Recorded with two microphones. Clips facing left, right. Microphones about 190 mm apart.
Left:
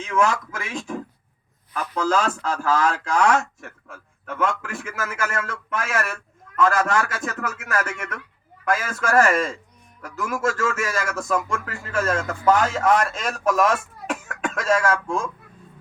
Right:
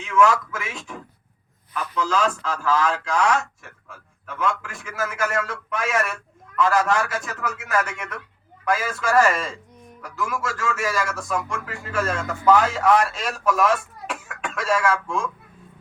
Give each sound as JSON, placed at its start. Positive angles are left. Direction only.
{"t": 0.0, "sound": "speech", "side_deg": 40}